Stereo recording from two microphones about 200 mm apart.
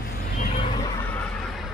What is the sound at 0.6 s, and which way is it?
Vehicle, 20° left (ahead or behind).